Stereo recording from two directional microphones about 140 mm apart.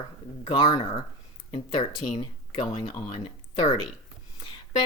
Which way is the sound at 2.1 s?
35° left (ahead or behind).